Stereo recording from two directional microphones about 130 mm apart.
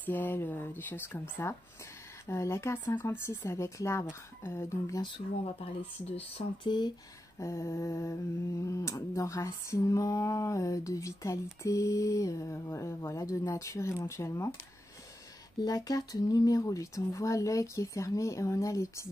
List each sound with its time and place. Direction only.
0.0 s speech: 15° left (ahead or behind)
2.2 s humming: 20° left (ahead or behind)
5.0 s speech: 40° left (ahead or behind)
7.3 s humming: 25° left (ahead or behind)
15.6 s humming: 30° left (ahead or behind)